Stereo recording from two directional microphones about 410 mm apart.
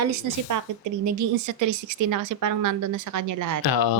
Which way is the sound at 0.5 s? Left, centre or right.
Right.